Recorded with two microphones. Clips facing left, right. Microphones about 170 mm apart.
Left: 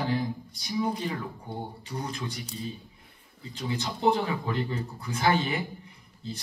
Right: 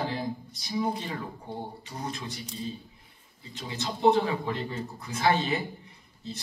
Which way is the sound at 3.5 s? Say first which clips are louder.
Left 6 dB; 30° left (ahead or behind).